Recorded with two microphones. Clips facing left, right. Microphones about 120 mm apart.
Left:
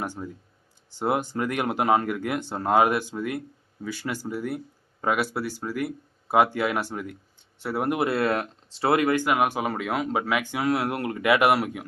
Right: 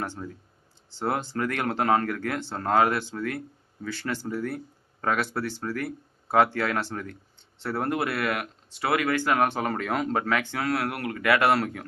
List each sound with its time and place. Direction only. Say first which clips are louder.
0.0 s speech: left 1 dB; 15° left (ahead or behind)